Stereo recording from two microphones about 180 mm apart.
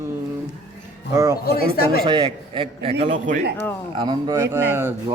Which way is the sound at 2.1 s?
25° right (ahead or behind).